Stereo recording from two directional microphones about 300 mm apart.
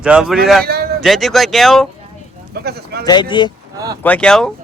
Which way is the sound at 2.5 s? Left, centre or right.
Right.